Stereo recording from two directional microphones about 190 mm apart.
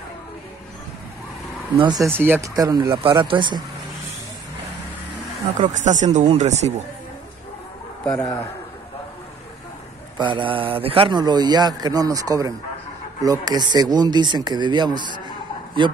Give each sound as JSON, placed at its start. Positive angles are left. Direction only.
{"t": 1.8, "sound": "a man's voice", "side_deg": -20}
{"t": 5.6, "sound": "speech", "side_deg": -40}
{"t": 8.0, "sound": "a man's voice", "side_deg": 10}
{"t": 10.1, "sound": "a man's voice", "side_deg": -25}